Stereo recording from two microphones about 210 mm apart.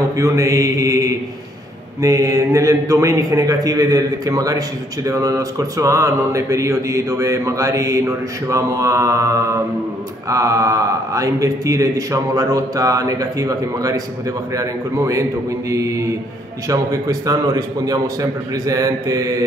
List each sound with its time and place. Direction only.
0.1 s a man's voice: 15° right (ahead or behind)